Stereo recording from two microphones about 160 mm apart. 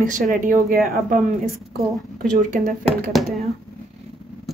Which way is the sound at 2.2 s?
55° right (ahead or behind).